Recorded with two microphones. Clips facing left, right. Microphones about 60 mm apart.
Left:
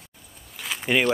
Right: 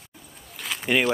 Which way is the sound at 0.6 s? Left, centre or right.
Centre.